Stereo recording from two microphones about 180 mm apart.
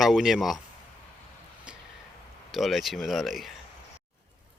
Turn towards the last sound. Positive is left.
turn(degrees=0)  # may be behind; listen again after turning